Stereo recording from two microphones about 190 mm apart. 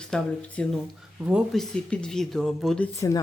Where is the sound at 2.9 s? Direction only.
15° left (ahead or behind).